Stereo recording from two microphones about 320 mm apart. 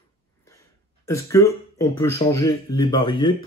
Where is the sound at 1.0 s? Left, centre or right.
Centre.